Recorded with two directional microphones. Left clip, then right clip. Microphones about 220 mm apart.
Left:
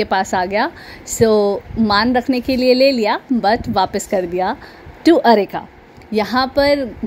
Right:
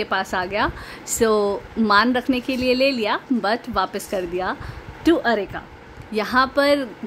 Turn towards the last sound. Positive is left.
turn(degrees=15)  # may be behind; listen again after turning